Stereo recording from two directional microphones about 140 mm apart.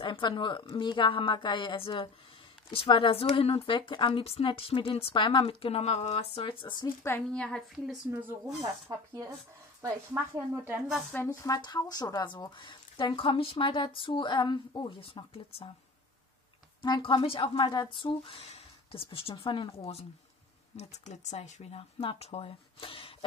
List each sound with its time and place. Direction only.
0.0 s speech: 35° left (ahead or behind)
7.2 s a woman's voice: 5° left (ahead or behind)
8.1 s speech: 15° right (ahead or behind)
9.8 s speech: 20° right (ahead or behind)
10.9 s a woman's voice: centre (ahead or behind)
11.2 s speech: 25° left (ahead or behind); by 15.7 s 40° left (ahead or behind)
16.8 s speech: 30° left (ahead or behind)